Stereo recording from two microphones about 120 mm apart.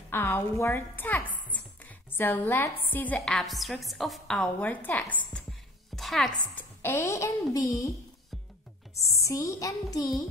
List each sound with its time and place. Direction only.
0.1 s a woman's voice: 20° left (ahead or behind)
3.2 s a woman's voice: centre (ahead or behind)
5.9 s music: centre (ahead or behind)
6.8 s speech: 20° left (ahead or behind)
9.1 s speech: 25° left (ahead or behind)